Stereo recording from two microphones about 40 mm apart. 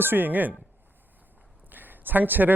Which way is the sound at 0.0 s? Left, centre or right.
Right.